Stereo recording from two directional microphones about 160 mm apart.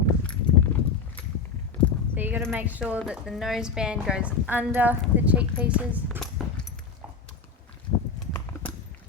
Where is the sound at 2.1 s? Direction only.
10° right (ahead or behind).